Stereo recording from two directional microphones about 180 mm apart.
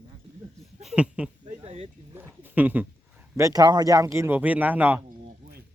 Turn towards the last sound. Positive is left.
turn(degrees=-55)  # may be behind; listen again after turning